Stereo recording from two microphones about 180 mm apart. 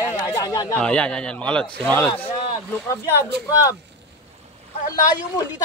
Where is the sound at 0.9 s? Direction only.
5° left (ahead or behind).